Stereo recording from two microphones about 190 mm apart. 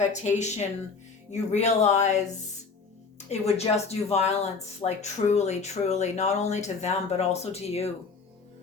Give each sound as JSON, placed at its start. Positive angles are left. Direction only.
{"t": 0.0, "sound": "speech", "side_deg": 40}
{"t": 3.2, "sound": "speech", "side_deg": 35}